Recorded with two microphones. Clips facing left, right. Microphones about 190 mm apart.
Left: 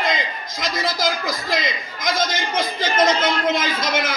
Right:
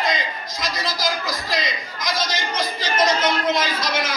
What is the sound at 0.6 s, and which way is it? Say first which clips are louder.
Speech: left 3 dB; 55° left (ahead or behind).